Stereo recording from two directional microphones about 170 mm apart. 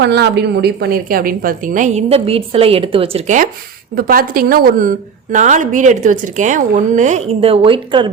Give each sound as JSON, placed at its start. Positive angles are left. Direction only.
{"t": 0.0, "sound": "a woman's voice", "side_deg": -75}
{"t": 3.9, "sound": "a woman's voice", "side_deg": -60}